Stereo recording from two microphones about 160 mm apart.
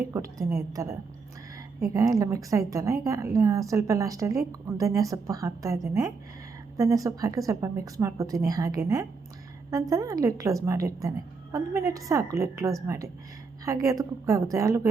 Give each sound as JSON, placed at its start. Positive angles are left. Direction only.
{"t": 0.1, "sound": "a woman's voice", "side_deg": -20}